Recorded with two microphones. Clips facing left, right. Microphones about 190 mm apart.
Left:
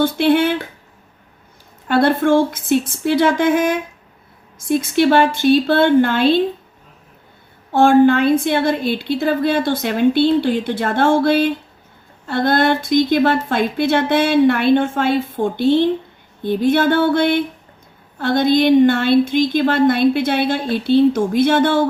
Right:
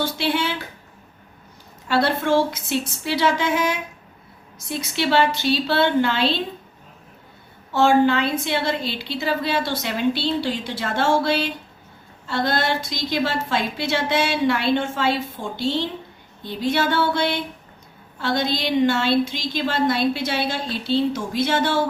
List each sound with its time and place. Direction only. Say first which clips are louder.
0.0 s a woman's voice: left 9 dB; 55° left (ahead or behind)
1.9 s a woman's voice: left 6 dB; 50° left (ahead or behind)
7.7 s a woman's voice: left 6 dB; 50° left (ahead or behind)